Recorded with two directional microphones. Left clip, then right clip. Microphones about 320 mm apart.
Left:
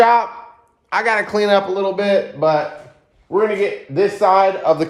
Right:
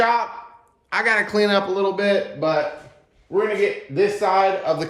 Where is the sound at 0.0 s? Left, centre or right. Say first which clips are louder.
Left 6 dB; left.